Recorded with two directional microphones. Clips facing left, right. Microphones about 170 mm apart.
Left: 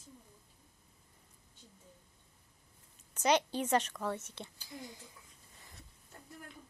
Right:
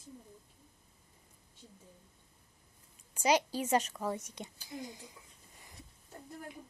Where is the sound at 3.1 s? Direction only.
10° right (ahead or behind).